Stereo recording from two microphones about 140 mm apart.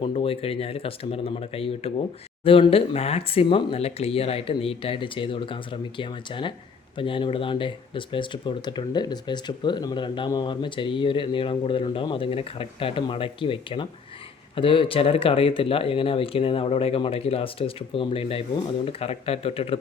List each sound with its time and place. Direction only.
0.0 s speech: 40° left (ahead or behind)